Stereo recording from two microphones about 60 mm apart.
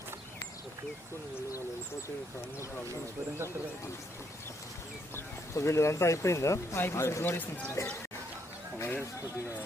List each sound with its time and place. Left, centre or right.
5.5 s speech: left
6.7 s speech: left
7.8 s speech: left
8.8 s a sound: left